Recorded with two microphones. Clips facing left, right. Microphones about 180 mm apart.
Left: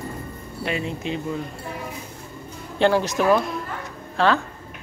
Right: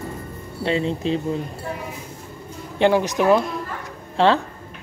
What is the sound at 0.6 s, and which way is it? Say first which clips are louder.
Speech: right 5 dB; 30° right (ahead or behind).